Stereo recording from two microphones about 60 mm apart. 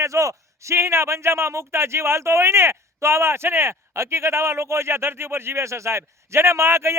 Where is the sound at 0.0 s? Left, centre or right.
Right.